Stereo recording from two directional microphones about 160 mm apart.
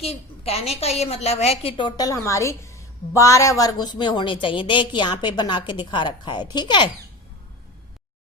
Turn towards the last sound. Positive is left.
turn(degrees=30)  # may be behind; listen again after turning